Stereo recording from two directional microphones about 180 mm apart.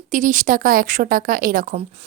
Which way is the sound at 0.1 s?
45° right (ahead or behind).